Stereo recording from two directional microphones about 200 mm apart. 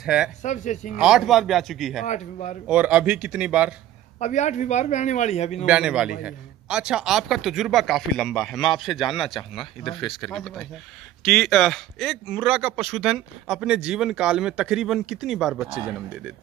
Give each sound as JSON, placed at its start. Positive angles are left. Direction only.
{"t": 0.0, "sound": "speech", "side_deg": -5}
{"t": 0.4, "sound": "a man's voice", "side_deg": 35}
{"t": 0.9, "sound": "speech", "side_deg": -5}
{"t": 2.0, "sound": "a man's voice", "side_deg": 35}
{"t": 2.7, "sound": "speech", "side_deg": -5}
{"t": 4.2, "sound": "a man's voice", "side_deg": 35}
{"t": 5.7, "sound": "speech", "side_deg": -5}